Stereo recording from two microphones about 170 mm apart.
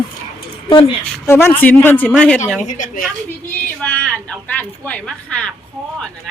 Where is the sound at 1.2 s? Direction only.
15° left (ahead or behind).